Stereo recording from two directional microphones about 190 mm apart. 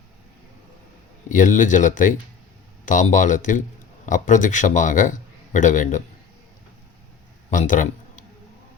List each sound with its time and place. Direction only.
1.3 s a man's voice: 45° left (ahead or behind)
7.5 s a man's voice: 45° left (ahead or behind)